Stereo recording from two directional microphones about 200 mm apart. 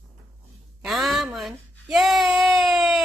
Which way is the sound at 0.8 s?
Centre (ahead or behind).